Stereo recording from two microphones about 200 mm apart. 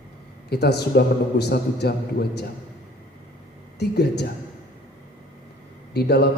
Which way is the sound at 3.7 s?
55° left (ahead or behind).